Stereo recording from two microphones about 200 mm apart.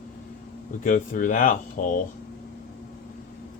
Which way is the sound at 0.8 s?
40° left (ahead or behind).